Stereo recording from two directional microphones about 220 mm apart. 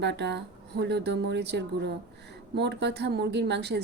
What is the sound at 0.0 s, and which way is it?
Speech, 50° right (ahead or behind).